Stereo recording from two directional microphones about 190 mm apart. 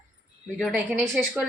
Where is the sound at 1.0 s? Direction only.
10° right (ahead or behind).